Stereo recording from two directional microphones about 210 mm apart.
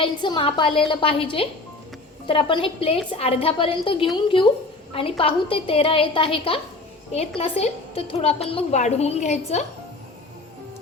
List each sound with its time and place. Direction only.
0.0 s a woman's voice: 20° left (ahead or behind)